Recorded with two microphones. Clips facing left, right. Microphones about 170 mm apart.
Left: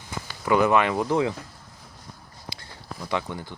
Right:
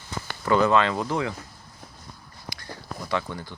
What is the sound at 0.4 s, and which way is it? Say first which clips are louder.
Speech: even; 15° left (ahead or behind).